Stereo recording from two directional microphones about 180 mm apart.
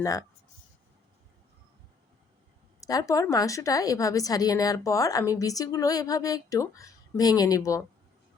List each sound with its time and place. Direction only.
0.0 s a woman's voice: 20° left (ahead or behind)
2.8 s a woman's voice: 20° left (ahead or behind)